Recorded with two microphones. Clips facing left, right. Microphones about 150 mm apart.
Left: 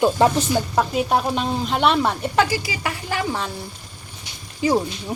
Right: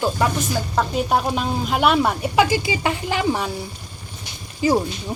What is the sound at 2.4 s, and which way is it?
Speech, 20° right (ahead or behind).